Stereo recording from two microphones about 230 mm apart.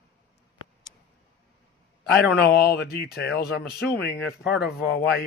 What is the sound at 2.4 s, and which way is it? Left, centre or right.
Speech, left.